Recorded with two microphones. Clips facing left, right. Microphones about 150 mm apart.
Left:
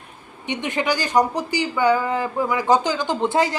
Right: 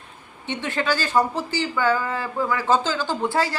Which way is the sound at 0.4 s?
15° left (ahead or behind).